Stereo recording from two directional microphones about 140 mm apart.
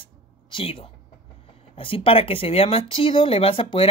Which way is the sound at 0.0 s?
40° left (ahead or behind).